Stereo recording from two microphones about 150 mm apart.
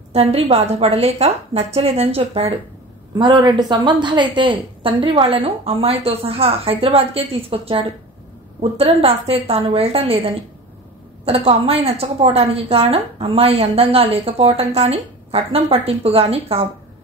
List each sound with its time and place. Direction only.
0.1 s a woman's voice: 45° right (ahead or behind)
3.2 s a woman's voice: 30° right (ahead or behind)
8.8 s a woman's voice: 40° right (ahead or behind)